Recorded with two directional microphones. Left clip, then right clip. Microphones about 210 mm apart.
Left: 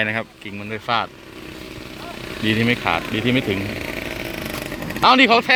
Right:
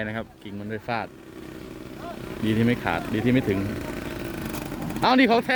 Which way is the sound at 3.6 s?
55° right (ahead or behind).